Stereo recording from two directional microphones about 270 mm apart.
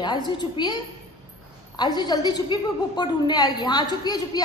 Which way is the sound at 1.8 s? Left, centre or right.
Centre.